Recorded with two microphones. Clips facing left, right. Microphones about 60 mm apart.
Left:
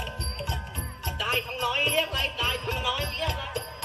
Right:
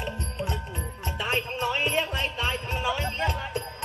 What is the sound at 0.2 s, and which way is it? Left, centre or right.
Music, right.